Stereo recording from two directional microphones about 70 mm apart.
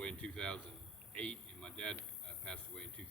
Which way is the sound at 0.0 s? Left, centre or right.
Centre.